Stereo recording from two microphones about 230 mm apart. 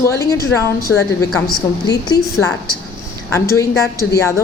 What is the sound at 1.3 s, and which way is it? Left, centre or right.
Speech, centre.